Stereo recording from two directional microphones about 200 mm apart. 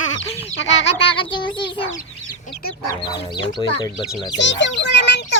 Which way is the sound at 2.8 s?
20° left (ahead or behind).